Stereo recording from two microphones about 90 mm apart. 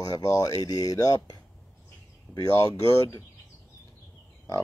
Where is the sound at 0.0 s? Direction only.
40° left (ahead or behind).